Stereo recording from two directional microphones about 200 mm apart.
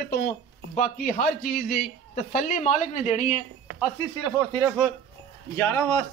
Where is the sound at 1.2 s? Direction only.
50° left (ahead or behind).